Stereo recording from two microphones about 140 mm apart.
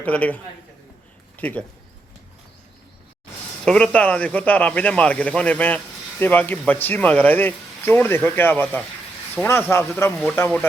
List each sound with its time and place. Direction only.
0.0 s speech: 10° left (ahead or behind)
3.6 s speech: 5° left (ahead or behind)